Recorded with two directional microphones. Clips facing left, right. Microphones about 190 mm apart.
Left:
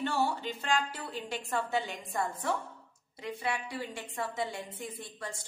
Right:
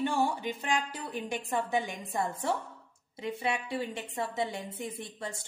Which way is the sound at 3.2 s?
25° right (ahead or behind).